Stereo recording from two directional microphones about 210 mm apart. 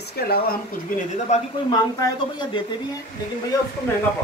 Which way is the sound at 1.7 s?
20° left (ahead or behind).